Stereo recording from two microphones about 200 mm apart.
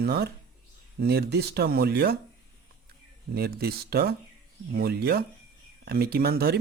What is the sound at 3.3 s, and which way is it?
Speech, 50° right (ahead or behind).